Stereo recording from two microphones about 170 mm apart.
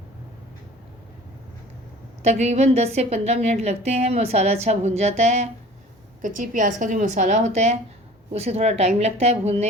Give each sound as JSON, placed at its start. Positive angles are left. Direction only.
{"t": 2.2, "sound": "a woman's voice", "side_deg": -40}